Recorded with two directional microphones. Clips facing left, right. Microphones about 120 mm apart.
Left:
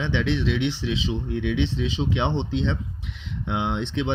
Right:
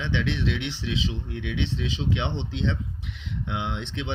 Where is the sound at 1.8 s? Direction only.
35° left (ahead or behind).